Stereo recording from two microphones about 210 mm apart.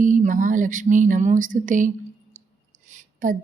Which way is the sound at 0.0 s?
35° right (ahead or behind).